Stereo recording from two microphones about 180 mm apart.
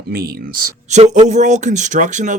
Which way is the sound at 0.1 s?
60° right (ahead or behind).